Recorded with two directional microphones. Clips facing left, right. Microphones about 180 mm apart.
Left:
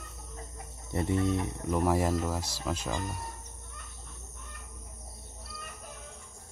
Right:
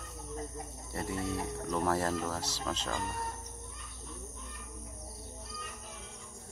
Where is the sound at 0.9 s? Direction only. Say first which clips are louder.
Left 7 dB; 20° left (ahead or behind).